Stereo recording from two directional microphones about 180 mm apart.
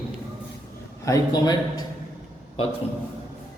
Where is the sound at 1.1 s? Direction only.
20° left (ahead or behind).